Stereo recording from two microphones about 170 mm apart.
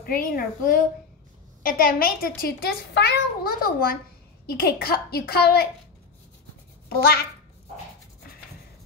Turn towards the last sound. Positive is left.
turn(degrees=65)  # may be behind; listen again after turning